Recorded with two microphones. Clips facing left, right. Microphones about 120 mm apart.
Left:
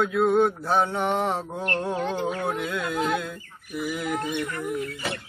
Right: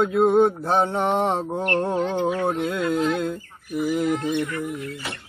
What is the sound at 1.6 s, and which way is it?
Speech, 35° right (ahead or behind).